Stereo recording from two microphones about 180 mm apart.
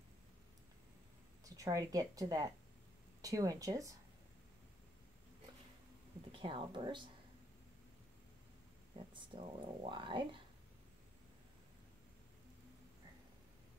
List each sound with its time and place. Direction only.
1.4 s speech: 20° right (ahead or behind)
6.3 s speech: 30° right (ahead or behind)
8.9 s speech: 30° right (ahead or behind)